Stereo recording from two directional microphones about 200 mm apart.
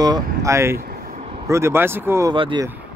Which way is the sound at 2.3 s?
25° right (ahead or behind).